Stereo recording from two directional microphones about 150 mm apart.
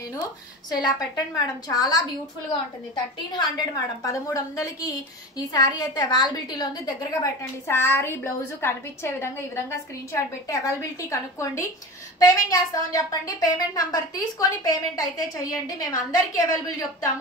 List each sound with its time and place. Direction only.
0.1 s a woman's voice: 25° left (ahead or behind)
3.3 s a woman's voice: 25° left (ahead or behind)